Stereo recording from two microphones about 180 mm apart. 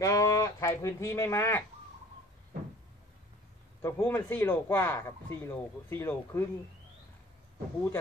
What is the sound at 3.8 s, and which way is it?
Speech, 15° left (ahead or behind).